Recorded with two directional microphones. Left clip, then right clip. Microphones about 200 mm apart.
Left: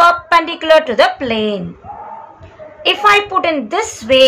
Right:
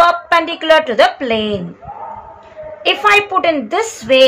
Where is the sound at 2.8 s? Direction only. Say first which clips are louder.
Left 1 dB; centre (ahead or behind).